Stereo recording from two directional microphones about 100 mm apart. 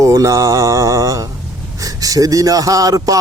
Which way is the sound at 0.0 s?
30° right (ahead or behind).